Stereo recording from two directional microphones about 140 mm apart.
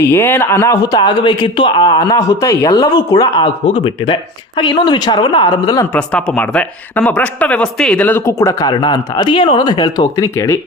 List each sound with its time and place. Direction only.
0.0 s speech: 15° left (ahead or behind)
5.9 s speech: 10° left (ahead or behind)